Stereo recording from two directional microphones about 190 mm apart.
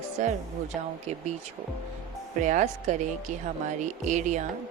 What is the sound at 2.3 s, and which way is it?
Speech, 40° right (ahead or behind).